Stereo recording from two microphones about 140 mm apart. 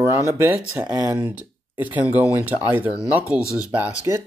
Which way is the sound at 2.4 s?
10° right (ahead or behind).